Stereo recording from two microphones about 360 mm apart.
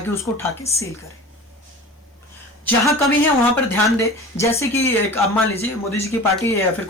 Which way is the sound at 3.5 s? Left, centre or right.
Centre.